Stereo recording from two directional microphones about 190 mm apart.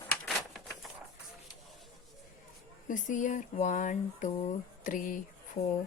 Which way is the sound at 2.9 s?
40° left (ahead or behind).